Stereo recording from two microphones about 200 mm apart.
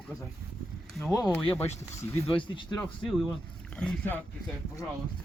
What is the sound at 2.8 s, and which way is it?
Speech, 5° left (ahead or behind).